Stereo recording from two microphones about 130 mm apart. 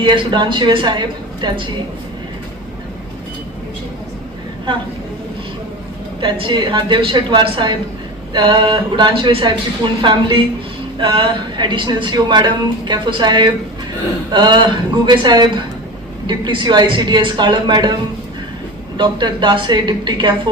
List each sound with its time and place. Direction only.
0.0 s a woman's voice: 35° right (ahead or behind)
6.1 s a woman's voice: 40° right (ahead or behind)
18.9 s a woman's voice: 35° right (ahead or behind)